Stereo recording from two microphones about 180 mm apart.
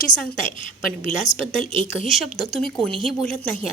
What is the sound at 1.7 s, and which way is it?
Speech, 30° right (ahead or behind).